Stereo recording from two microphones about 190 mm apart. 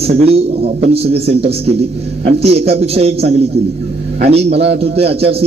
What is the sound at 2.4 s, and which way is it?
Speech, 30° right (ahead or behind).